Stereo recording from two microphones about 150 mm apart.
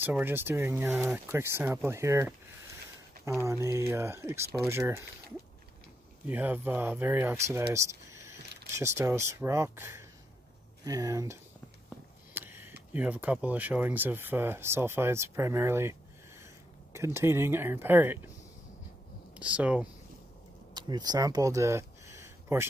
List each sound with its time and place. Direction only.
0.0 s speech: 15° right (ahead or behind)
6.2 s speech: 10° right (ahead or behind)
12.4 s a sound: 15° right (ahead or behind)
12.9 s speech: 10° right (ahead or behind)
19.3 s speech: 10° right (ahead or behind)
20.7 s speech: 25° right (ahead or behind)